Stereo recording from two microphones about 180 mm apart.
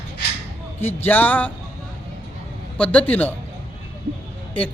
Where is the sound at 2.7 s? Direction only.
5° left (ahead or behind).